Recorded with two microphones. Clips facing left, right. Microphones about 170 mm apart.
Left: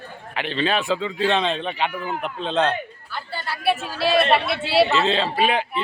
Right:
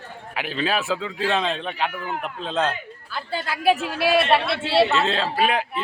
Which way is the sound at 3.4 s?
90° right.